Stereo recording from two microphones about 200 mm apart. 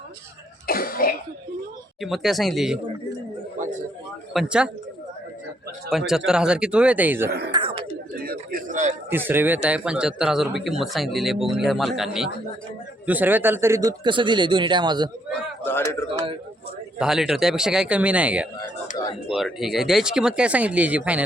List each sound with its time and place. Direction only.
0.7 s cough: 45° left (ahead or behind)
2.0 s speech: centre (ahead or behind)
4.4 s speech: 5° right (ahead or behind)
5.9 s speech: centre (ahead or behind)
7.3 s speech: 55° right (ahead or behind)
7.5 s chuckle: 25° right (ahead or behind)
8.2 s a sound: 50° right (ahead or behind)
9.0 s speech: 10° right (ahead or behind)
15.3 s a man's voice: 10° left (ahead or behind)
17.0 s speech: centre (ahead or behind)